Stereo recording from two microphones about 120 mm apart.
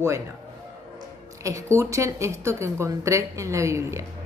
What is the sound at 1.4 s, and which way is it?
A woman's voice, 25° right (ahead or behind).